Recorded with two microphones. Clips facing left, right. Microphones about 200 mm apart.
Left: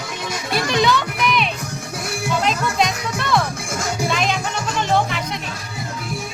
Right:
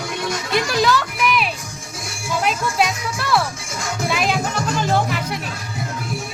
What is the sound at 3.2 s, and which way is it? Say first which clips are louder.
Music: even; 5° right (ahead or behind).